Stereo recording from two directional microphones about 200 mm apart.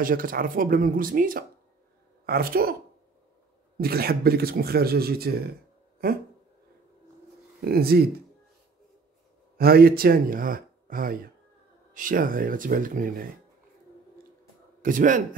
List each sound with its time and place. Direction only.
0.0 s speech: 45° right (ahead or behind)
3.7 s speech: 50° right (ahead or behind)
7.6 s speech: 50° right (ahead or behind)
9.6 s speech: 50° right (ahead or behind)
14.8 s a man's voice: 40° right (ahead or behind)